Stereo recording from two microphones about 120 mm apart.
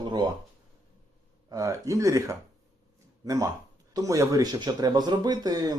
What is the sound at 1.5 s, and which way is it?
Speech, 30° right (ahead or behind).